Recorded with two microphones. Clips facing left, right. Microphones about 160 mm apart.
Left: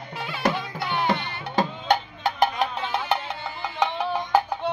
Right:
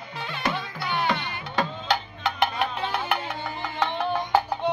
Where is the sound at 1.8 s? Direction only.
55° left (ahead or behind).